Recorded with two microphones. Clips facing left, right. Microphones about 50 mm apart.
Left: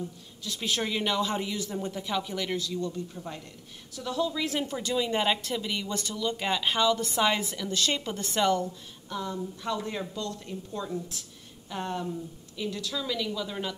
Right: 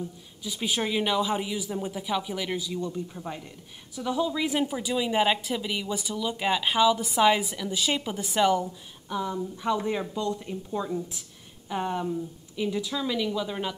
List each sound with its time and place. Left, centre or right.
0.4 s speech: centre